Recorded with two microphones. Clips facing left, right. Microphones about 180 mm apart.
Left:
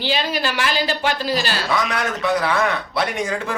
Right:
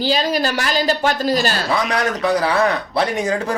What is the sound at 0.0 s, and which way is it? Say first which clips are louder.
Speech: right 4 dB; 40° right (ahead or behind).